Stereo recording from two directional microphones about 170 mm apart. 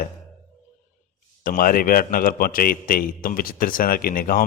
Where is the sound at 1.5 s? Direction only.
55° left (ahead or behind).